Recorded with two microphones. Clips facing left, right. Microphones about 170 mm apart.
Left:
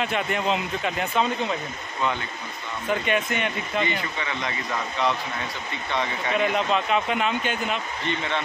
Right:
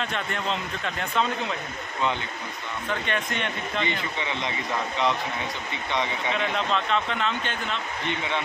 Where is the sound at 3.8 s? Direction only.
20° right (ahead or behind).